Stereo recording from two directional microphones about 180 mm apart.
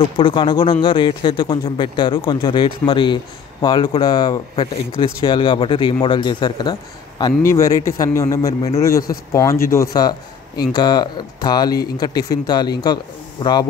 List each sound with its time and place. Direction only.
0.2 s speech: 25° left (ahead or behind)